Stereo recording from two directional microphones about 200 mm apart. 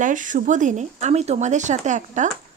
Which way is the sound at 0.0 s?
40° right (ahead or behind).